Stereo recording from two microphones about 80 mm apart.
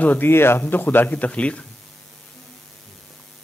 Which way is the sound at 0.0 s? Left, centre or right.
Left.